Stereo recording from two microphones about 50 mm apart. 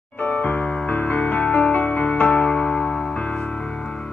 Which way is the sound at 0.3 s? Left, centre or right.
Left.